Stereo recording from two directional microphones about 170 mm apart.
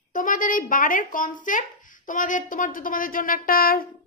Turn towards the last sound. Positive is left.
turn(degrees=60)  # may be behind; listen again after turning